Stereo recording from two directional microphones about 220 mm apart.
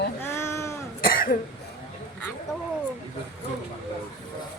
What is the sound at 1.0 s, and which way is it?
Cough, 40° left (ahead or behind).